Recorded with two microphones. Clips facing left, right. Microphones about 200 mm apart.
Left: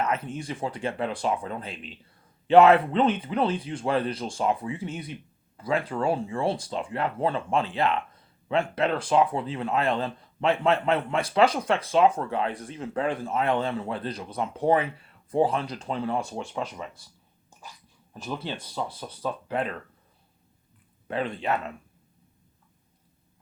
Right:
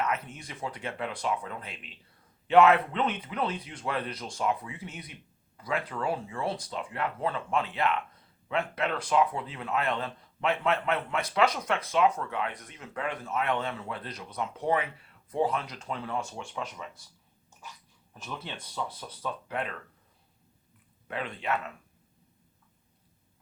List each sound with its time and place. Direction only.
0.0 s speech: 30° left (ahead or behind)
18.1 s speech: 35° left (ahead or behind)
21.1 s speech: 30° left (ahead or behind)